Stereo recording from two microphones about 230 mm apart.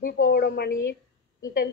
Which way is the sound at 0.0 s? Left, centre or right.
Left.